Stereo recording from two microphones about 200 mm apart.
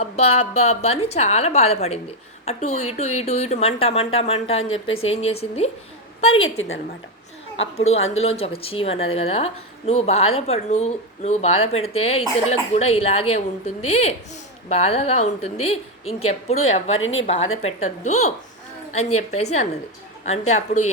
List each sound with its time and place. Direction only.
0.0 s a sound: 30° left (ahead or behind)
0.6 s a woman's voice: 30° left (ahead or behind)
6.4 s a woman's voice: 80° left
7.9 s a woman's voice: 80° left
8.2 s a woman's voice: 30° left (ahead or behind)
17.0 s a woman's voice: 80° left
17.2 s a woman's voice: 30° left (ahead or behind)